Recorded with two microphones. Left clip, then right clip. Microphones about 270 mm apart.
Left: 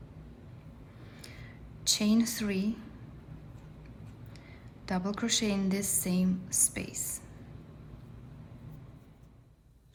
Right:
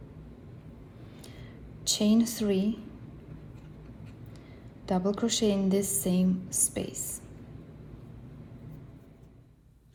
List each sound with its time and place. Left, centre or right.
1.8 s a woman's voice: left
4.9 s a woman's voice: left